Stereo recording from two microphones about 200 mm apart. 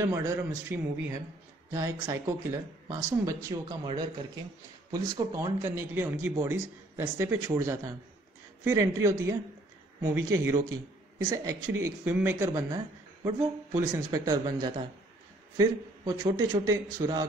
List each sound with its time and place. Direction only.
0.0 s speech: 15° right (ahead or behind)